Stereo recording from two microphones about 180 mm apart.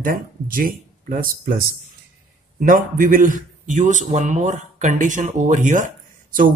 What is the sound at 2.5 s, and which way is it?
A man's voice, 50° right (ahead or behind).